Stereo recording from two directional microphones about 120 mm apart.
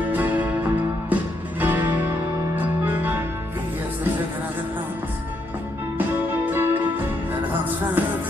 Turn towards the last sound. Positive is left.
turn(degrees=-15)  # may be behind; listen again after turning